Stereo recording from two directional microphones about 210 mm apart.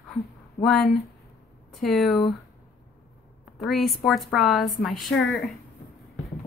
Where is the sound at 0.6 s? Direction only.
Centre (ahead or behind).